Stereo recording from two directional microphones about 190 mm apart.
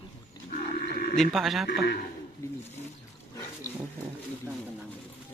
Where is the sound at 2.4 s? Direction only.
15° left (ahead or behind).